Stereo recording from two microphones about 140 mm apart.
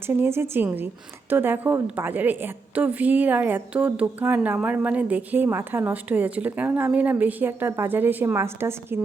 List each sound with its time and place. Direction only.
0.1 s a woman's voice: 15° right (ahead or behind)